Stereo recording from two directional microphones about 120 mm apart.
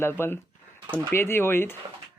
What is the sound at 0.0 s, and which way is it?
Speech, 20° left (ahead or behind).